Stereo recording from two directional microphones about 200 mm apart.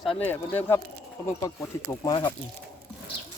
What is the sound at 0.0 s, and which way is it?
Speech, 5° left (ahead or behind).